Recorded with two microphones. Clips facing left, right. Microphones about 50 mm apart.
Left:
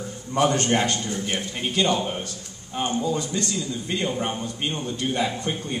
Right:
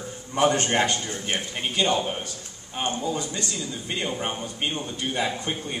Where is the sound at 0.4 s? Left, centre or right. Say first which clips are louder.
Even; right.